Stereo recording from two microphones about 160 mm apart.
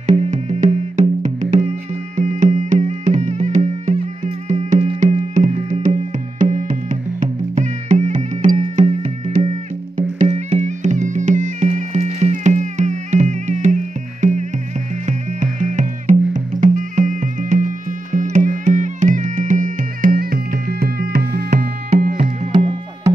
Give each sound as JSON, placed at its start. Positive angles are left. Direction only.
{"t": 0.0, "sound": "music", "side_deg": -45}
{"t": 22.0, "sound": "music", "side_deg": -50}